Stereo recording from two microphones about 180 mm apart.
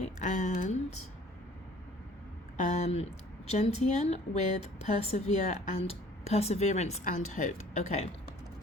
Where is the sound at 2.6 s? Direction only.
40° left (ahead or behind).